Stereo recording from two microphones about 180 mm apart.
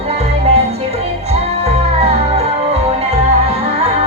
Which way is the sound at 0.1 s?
35° right (ahead or behind).